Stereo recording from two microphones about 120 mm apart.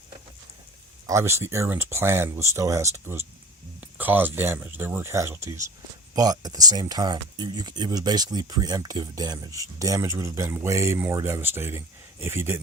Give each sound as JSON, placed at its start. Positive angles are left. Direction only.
{"t": 1.0, "sound": "speech", "side_deg": -25}